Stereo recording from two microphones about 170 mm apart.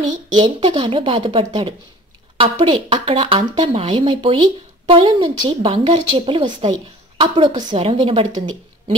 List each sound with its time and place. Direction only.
0.4 s speech: 30° right (ahead or behind)